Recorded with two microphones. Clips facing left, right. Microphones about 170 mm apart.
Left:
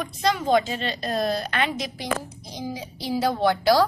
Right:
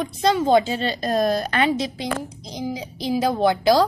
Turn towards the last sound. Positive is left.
turn(degrees=-15)  # may be behind; listen again after turning